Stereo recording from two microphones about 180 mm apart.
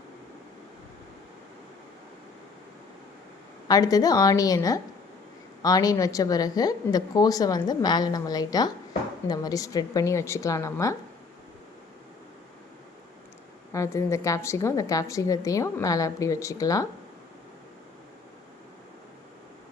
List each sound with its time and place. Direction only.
3.7 s a woman's voice: 20° left (ahead or behind)
13.7 s a woman's voice: 15° left (ahead or behind)